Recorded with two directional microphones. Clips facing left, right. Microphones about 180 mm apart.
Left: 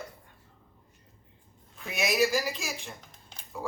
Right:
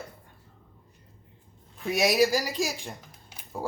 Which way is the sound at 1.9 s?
40° right (ahead or behind).